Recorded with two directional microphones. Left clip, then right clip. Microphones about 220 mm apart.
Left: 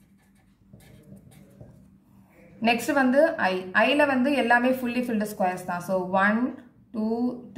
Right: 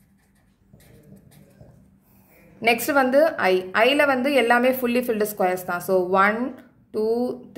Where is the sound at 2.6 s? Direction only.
50° right (ahead or behind).